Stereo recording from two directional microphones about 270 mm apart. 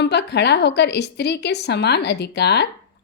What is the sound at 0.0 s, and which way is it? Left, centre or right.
A woman's voice, left.